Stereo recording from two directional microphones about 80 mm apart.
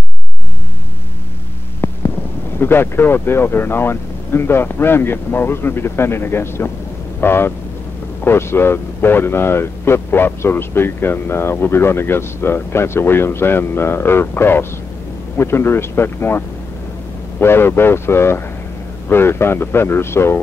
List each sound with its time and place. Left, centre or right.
2.6 s speech: left